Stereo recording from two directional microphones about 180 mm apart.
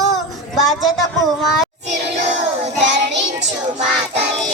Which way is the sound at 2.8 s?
75° right (ahead or behind).